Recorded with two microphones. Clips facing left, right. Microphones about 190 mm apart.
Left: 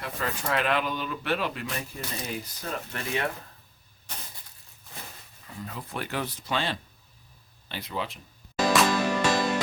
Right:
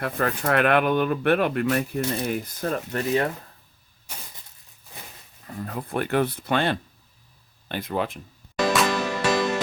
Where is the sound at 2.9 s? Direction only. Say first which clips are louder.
Right 7 dB; 40° right (ahead or behind).